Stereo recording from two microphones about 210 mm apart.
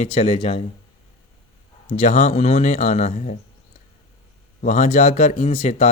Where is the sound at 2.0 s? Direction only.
35° left (ahead or behind).